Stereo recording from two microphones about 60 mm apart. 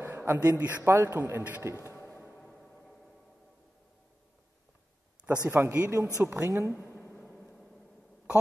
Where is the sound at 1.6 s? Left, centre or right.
Right.